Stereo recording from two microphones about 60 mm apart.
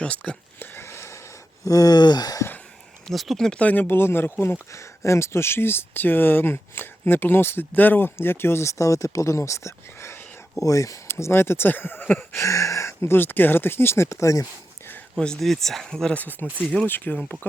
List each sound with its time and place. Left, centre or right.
0.0 s speech: centre
0.6 s a sound: left
1.6 s speech: left
3.1 s speech: centre
3.6 s speech: left
4.7 s speech: left
10.6 s speech: left
11.1 s speech: left
12.4 s speech: left
13.1 s speech: left
15.1 s speech: centre
16.1 s speech: left